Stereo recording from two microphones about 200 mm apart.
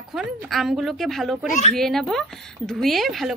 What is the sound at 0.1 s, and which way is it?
Speech, centre (ahead or behind).